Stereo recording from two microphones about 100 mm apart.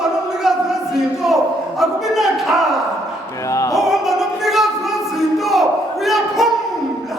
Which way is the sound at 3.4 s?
30° left (ahead or behind).